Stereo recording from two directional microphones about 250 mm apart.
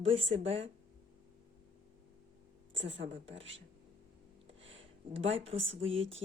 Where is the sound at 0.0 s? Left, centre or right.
Right.